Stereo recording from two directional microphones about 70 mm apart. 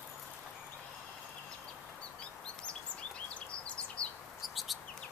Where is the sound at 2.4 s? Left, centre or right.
Centre.